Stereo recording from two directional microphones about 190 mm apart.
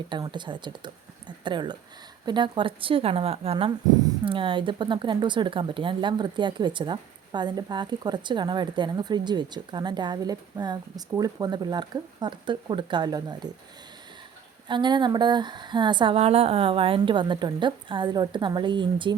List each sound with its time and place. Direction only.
0.1 s speech: 25° right (ahead or behind)
14.7 s speech: 25° right (ahead or behind)